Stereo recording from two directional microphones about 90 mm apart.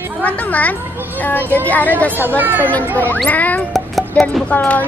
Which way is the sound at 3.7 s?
Centre (ahead or behind).